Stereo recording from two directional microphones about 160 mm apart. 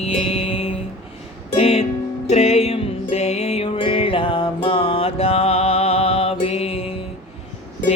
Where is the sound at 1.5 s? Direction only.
40° left (ahead or behind).